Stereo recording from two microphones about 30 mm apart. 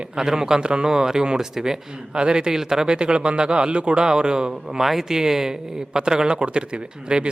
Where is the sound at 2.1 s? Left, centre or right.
Right.